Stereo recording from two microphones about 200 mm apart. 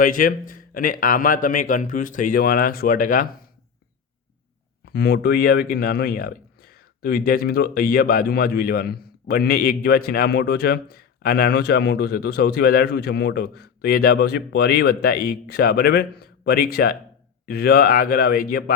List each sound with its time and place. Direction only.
0.0 s a man's voice: 45° left (ahead or behind)
4.9 s a man's voice: 55° left (ahead or behind)